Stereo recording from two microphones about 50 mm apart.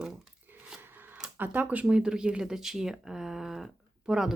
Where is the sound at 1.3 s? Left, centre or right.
Right.